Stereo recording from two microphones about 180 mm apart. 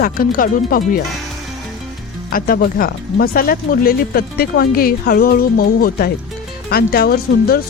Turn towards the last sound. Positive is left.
turn(degrees=55)  # may be behind; listen again after turning